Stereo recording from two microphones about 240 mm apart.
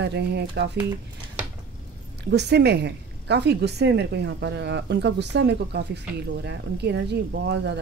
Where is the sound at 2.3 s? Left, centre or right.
Right.